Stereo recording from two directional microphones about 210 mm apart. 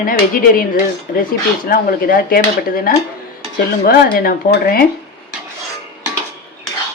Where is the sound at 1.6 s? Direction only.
45° left (ahead or behind).